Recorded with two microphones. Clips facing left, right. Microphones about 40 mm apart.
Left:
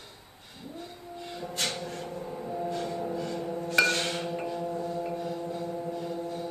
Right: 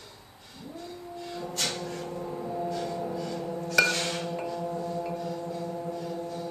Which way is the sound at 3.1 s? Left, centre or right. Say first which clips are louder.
Even; centre.